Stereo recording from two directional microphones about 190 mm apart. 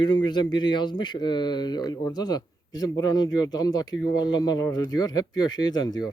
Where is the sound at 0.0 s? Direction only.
25° left (ahead or behind).